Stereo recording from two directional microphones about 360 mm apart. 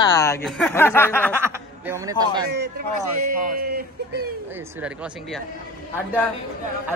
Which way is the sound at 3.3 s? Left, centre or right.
Right.